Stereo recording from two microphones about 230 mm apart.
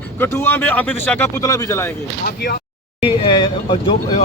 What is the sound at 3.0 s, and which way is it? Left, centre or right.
Speech, left.